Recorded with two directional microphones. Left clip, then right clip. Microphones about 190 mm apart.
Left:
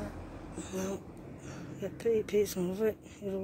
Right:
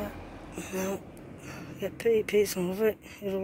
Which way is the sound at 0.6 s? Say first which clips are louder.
Right 5 dB; 10° right (ahead or behind).